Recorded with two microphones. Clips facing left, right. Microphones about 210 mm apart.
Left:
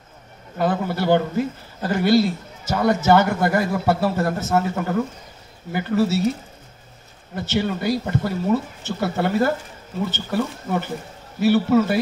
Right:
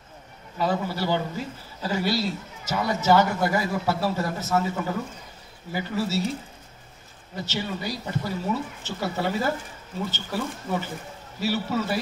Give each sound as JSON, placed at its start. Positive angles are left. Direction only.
{"t": 0.6, "sound": "speech", "side_deg": 55}
{"t": 7.3, "sound": "speech", "side_deg": 55}